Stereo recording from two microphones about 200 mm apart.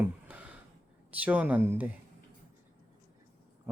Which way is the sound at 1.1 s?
5° right (ahead or behind).